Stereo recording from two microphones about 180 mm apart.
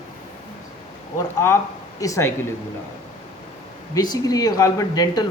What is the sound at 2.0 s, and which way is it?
Speech, 15° left (ahead or behind).